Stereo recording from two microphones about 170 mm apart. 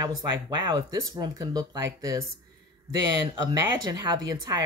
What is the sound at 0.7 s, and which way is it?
A woman's voice, 25° right (ahead or behind).